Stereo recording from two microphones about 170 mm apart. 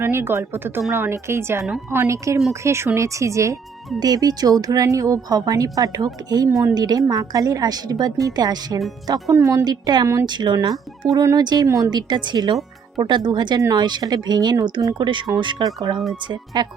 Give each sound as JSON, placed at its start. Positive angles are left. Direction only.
{"t": 0.0, "sound": "speech", "side_deg": -15}
{"t": 2.0, "sound": "speech", "side_deg": -15}